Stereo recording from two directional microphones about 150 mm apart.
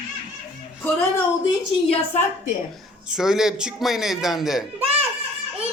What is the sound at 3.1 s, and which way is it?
Speech, 5° right (ahead or behind).